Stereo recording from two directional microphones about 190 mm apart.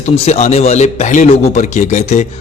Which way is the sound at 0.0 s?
35° left (ahead or behind).